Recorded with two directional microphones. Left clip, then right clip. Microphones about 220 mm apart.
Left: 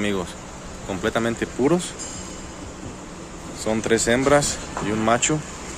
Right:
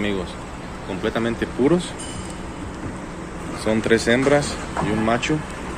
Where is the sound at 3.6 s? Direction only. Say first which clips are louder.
Right 2 dB; 10° left (ahead or behind).